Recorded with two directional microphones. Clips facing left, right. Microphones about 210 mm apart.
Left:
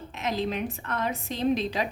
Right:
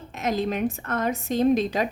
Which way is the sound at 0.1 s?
45° right (ahead or behind).